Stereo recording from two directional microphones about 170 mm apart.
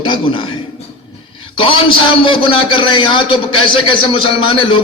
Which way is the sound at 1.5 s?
30° left (ahead or behind).